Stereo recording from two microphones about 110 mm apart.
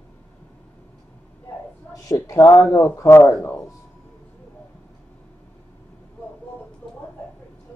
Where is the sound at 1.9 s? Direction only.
30° left (ahead or behind).